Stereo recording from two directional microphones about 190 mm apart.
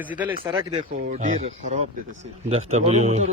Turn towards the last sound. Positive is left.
turn(degrees=-35)  # may be behind; listen again after turning